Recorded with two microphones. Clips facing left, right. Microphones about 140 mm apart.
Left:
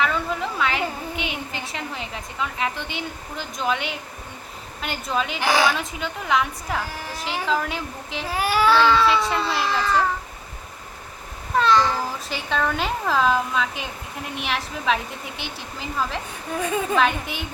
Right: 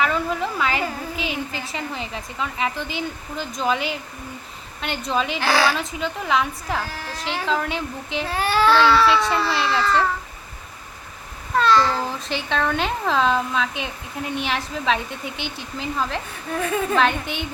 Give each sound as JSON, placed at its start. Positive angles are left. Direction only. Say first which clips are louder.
{"t": 0.0, "sound": "a woman's voice", "louder": "right 2 dB", "side_deg": 0}
{"t": 5.4, "sound": "speech", "louder": "left 1 dB", "side_deg": 15}
{"t": 5.7, "sound": "speech", "louder": "right 2 dB", "side_deg": 0}
{"t": 6.9, "sound": "speech", "louder": "right 1 dB", "side_deg": 10}
{"t": 9.0, "sound": "speech", "louder": "right 2 dB", "side_deg": 0}
{"t": 9.6, "sound": "speech", "louder": "right 1 dB", "side_deg": 15}
{"t": 11.5, "sound": "a sound", "louder": "right 1 dB", "side_deg": 15}
{"t": 12.3, "sound": "speech", "louder": "right 2 dB", "side_deg": 0}
{"t": 16.6, "sound": "speech", "louder": "right 1 dB", "side_deg": 15}
{"t": 16.9, "sound": "speech", "louder": "right 1 dB", "side_deg": 5}